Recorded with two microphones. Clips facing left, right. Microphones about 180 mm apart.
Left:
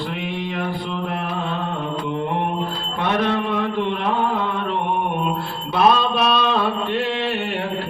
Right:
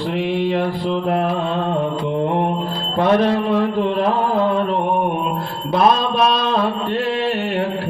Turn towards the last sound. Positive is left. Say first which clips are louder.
# right 2 dB
turn(degrees=-40)  # may be behind; listen again after turning